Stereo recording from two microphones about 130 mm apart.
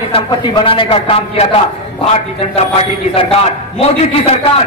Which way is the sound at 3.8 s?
55° left (ahead or behind).